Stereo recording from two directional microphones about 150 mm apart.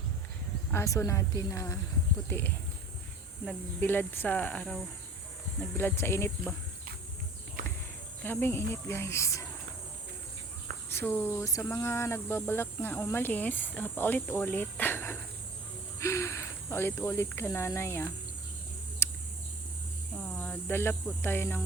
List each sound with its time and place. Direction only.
0.7 s speech: 20° left (ahead or behind)
5.7 s speech: 15° left (ahead or behind)
8.2 s speech: 15° left (ahead or behind)
10.8 s speech: 15° left (ahead or behind)
19.0 s a sound: 15° left (ahead or behind)
20.1 s speech: 10° left (ahead or behind)